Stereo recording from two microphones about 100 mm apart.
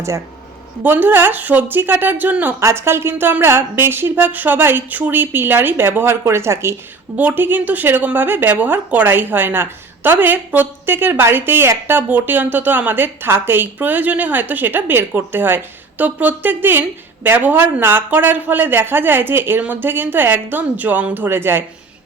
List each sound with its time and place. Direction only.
0.8 s speech: 20° right (ahead or behind)